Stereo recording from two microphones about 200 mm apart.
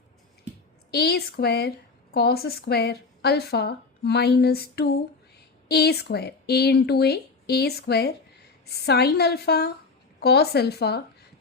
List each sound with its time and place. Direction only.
0.9 s a woman's voice: 50° left (ahead or behind)